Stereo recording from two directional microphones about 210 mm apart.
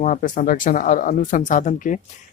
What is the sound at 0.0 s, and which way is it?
Speech, 40° left (ahead or behind).